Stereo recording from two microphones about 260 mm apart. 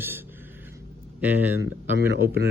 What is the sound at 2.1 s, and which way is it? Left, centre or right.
Speech, right.